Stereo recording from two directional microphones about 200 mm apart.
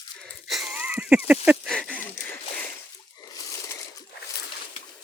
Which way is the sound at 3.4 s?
15° left (ahead or behind).